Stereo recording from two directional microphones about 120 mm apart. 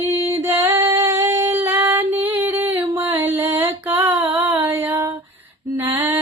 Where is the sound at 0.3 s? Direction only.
20° right (ahead or behind).